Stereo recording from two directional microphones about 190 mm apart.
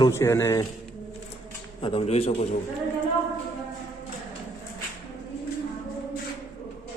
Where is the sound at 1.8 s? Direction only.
30° left (ahead or behind).